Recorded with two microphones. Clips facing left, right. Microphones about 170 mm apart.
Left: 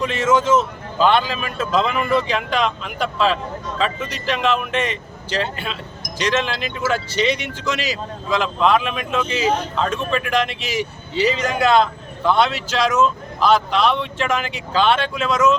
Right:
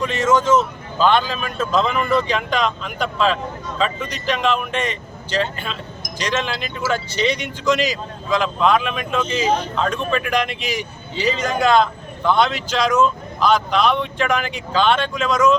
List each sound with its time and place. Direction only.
0.0 s speech: 5° left (ahead or behind)